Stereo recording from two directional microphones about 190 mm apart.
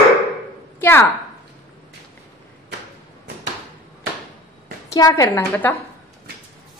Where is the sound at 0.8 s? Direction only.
10° left (ahead or behind).